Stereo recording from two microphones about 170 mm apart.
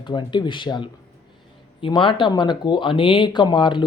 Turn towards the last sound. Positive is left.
turn(degrees=25)  # may be behind; listen again after turning